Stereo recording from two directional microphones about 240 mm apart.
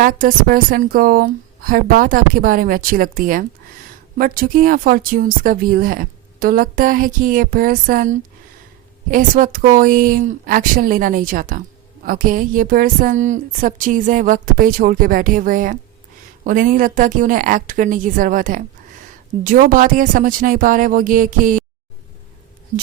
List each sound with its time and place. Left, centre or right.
0.0 s speech: right